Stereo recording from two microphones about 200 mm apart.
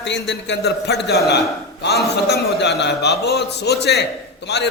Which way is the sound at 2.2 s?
55° left (ahead or behind).